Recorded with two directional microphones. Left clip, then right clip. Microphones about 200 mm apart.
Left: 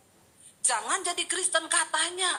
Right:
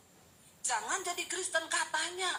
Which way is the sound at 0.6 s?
40° left (ahead or behind).